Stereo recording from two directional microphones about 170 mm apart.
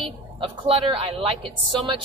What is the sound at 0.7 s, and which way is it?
Speech, 35° right (ahead or behind).